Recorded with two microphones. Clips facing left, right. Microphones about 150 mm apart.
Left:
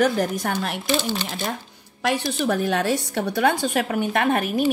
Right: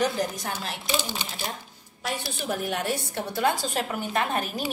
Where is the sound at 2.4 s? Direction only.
80° left.